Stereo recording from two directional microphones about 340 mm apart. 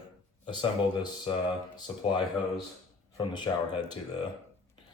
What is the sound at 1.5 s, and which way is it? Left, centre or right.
Speech, centre.